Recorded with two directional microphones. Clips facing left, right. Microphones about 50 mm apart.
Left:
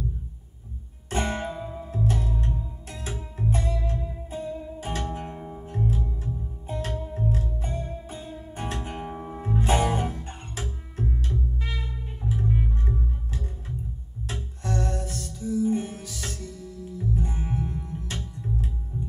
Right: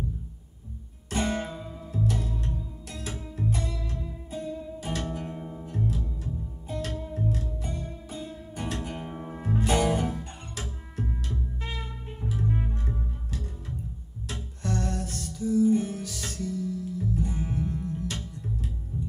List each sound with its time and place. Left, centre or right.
1.1 s music: left
9.1 s music: centre
9.4 s music: left
14.6 s music: left
16.1 s music: centre